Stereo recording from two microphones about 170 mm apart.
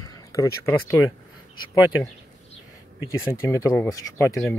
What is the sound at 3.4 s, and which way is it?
Speech, 15° left (ahead or behind).